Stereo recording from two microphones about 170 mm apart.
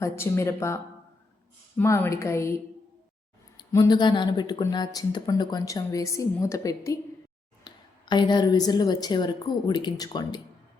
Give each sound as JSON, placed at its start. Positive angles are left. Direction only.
{"t": 0.0, "sound": "speech", "side_deg": 15}
{"t": 1.8, "sound": "speech", "side_deg": 15}
{"t": 3.6, "sound": "speech", "side_deg": 20}